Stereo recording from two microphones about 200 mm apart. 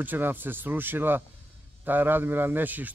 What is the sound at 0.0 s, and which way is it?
Speech, 10° right (ahead or behind).